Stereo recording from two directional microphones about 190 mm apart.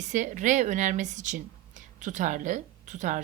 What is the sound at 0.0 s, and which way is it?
A woman's voice, 40° right (ahead or behind).